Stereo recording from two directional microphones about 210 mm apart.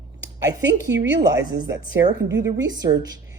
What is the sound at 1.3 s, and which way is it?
Speech, 15° right (ahead or behind).